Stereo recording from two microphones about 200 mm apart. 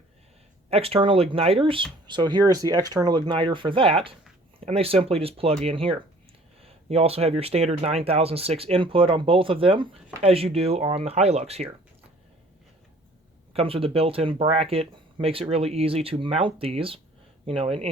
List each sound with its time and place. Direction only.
0.7 s speech: 30° right (ahead or behind)
13.5 s speech: 30° right (ahead or behind)